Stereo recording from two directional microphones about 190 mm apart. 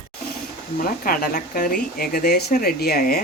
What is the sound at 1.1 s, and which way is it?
Speech, 50° left (ahead or behind).